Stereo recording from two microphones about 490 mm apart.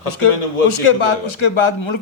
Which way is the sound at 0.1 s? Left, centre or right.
Left.